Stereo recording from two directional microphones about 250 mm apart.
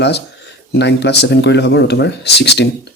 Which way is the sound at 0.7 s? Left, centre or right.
Left.